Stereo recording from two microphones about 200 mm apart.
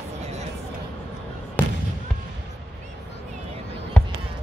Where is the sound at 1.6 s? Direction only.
10° left (ahead or behind).